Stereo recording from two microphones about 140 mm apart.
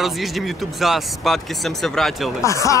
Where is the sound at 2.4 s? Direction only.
20° left (ahead or behind).